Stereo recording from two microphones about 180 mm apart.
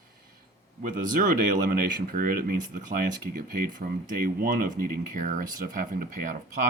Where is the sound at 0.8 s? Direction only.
45° right (ahead or behind).